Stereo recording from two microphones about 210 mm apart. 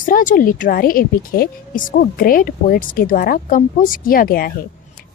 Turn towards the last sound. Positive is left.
turn(degrees=45)  # may be behind; listen again after turning